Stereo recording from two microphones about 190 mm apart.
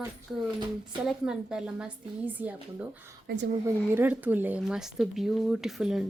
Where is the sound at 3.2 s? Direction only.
60° right (ahead or behind).